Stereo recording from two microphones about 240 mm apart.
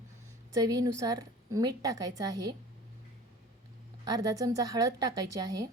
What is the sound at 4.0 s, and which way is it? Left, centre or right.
A woman's voice, centre.